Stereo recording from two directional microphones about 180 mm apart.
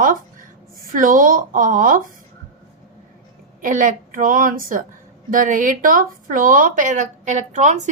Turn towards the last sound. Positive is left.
turn(degrees=-40)  # may be behind; listen again after turning